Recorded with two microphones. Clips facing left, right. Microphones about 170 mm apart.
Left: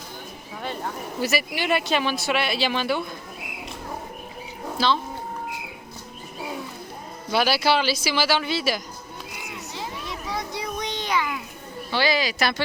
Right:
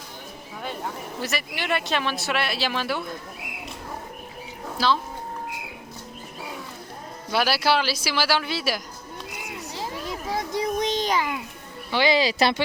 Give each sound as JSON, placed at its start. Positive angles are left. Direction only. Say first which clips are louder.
{"t": 1.2, "sound": "speech", "louder": "left 5 dB", "side_deg": 5}
{"t": 7.3, "sound": "speech", "louder": "left 1 dB", "side_deg": 0}
{"t": 9.7, "sound": "a sound", "louder": "right 2 dB", "side_deg": -45}
{"t": 11.9, "sound": "speech", "louder": "right 2 dB", "side_deg": -20}